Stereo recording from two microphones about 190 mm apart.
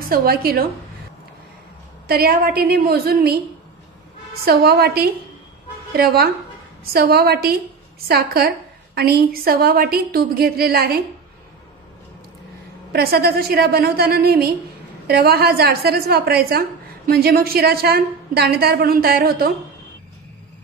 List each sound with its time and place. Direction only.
0.0 s a woman's voice: 50° right (ahead or behind)
2.0 s a woman's voice: 50° right (ahead or behind)
4.5 s a woman's voice: 55° right (ahead or behind)
12.9 s a woman's voice: 55° right (ahead or behind)